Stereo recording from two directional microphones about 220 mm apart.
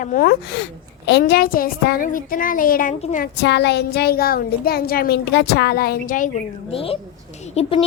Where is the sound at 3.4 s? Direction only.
50° left (ahead or behind).